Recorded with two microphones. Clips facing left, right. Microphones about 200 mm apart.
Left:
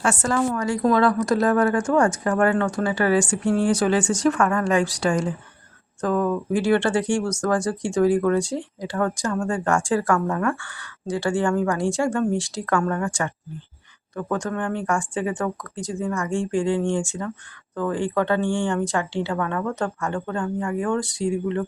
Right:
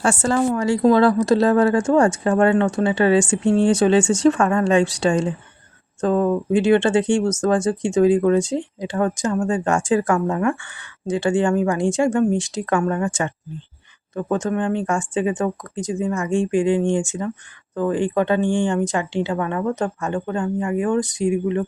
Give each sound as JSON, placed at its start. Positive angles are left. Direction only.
{"t": 0.0, "sound": "speech", "side_deg": -30}